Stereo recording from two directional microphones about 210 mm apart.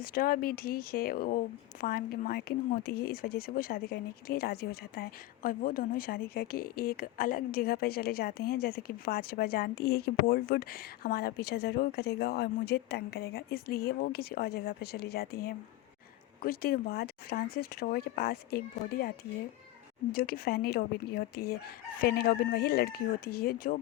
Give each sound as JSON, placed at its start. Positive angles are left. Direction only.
{"t": 0.0, "sound": "speech", "side_deg": 45}
{"t": 20.1, "sound": "speech", "side_deg": 45}